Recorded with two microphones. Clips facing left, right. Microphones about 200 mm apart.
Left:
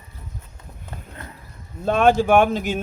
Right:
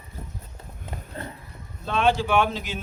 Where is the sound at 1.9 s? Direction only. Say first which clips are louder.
Left 6 dB; 50° left (ahead or behind).